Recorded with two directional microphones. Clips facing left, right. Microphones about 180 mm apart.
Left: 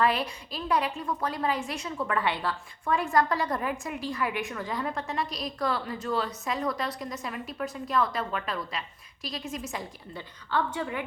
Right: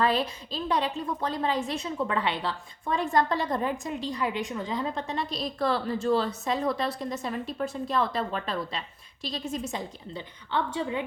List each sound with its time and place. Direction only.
0.0 s a woman's voice: 25° right (ahead or behind)